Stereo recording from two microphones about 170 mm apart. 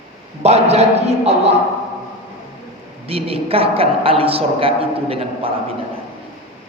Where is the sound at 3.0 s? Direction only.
35° right (ahead or behind).